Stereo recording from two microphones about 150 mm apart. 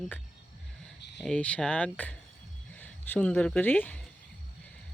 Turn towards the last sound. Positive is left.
turn(degrees=10)  # may be behind; listen again after turning